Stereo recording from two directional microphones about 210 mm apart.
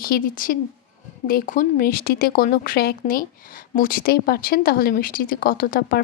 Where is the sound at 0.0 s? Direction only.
45° left (ahead or behind).